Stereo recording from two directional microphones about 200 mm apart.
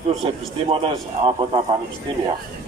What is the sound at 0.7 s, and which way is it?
A man's voice, 25° right (ahead or behind).